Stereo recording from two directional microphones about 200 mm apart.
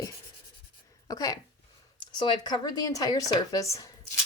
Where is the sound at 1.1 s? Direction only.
20° left (ahead or behind).